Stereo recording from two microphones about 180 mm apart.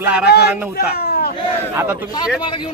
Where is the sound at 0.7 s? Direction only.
60° left (ahead or behind).